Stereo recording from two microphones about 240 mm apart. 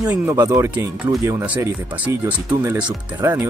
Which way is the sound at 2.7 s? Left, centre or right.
Centre.